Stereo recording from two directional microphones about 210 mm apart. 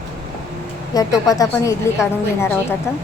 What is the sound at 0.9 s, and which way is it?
Speech, 15° left (ahead or behind).